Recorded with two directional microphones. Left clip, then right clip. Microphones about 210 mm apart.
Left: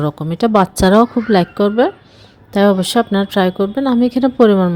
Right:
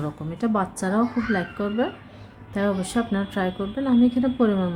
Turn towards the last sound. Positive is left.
turn(degrees=35)  # may be behind; listen again after turning